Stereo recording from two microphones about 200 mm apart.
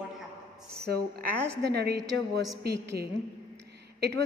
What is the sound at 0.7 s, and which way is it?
A woman's voice, 50° right (ahead or behind).